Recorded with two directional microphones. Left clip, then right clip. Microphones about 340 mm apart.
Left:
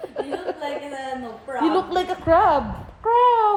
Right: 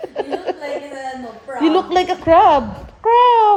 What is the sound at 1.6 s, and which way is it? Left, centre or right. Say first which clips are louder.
A woman's voice: right 6 dB; right.